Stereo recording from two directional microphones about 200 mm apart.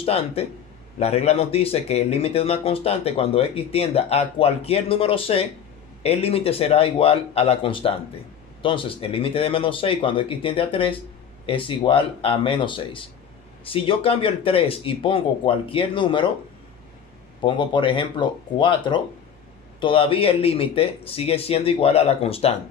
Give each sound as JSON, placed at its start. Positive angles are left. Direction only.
{"t": 0.0, "sound": "speech", "side_deg": 30}
{"t": 17.4, "sound": "speech", "side_deg": 25}